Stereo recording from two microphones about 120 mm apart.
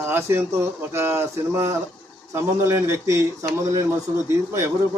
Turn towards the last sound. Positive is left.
turn(degrees=-20)  # may be behind; listen again after turning